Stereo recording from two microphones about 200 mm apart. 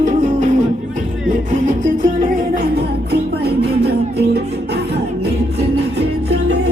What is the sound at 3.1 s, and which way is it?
Music, 55° right (ahead or behind).